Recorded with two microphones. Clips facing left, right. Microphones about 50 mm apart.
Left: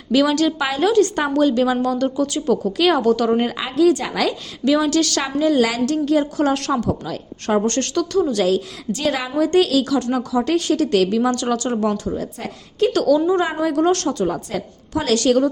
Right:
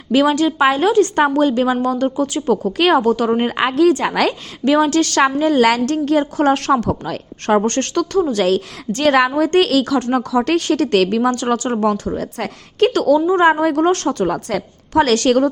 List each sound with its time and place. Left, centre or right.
0.1 s a woman's voice: right
3.0 s a woman's voice: right
3.5 s a woman's voice: right
4.6 s a woman's voice: right
7.6 s a woman's voice: right
8.4 s a woman's voice: right
10.3 s a woman's voice: right
11.3 s a woman's voice: right
11.8 s a woman's voice: right
12.9 s a woman's voice: right
13.1 s a woman's voice: right
13.4 s a woman's voice: right
14.3 s a woman's voice: right
15.0 s a woman's voice: right